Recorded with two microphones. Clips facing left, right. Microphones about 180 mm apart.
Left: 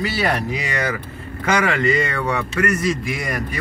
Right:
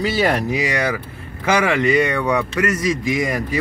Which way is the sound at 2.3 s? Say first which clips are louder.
Right 1 dB; 15° right (ahead or behind).